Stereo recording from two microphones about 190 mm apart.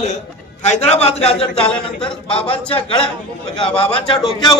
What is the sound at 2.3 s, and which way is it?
A man's voice, 30° left (ahead or behind).